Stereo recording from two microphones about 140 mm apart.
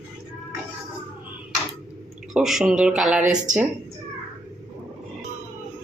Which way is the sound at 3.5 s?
65° right (ahead or behind).